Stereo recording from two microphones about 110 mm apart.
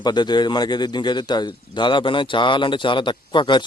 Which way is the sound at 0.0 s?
40° left (ahead or behind).